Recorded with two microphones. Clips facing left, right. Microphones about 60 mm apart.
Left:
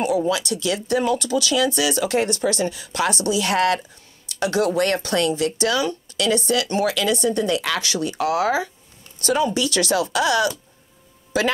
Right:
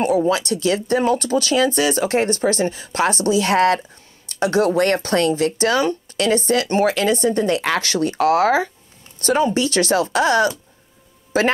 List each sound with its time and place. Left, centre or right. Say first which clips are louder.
0.0 s speech: right 3 dB; right